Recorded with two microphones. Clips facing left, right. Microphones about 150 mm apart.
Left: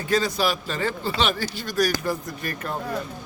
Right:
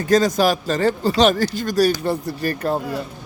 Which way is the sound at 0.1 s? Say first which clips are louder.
Right 7 dB; 45° right (ahead or behind).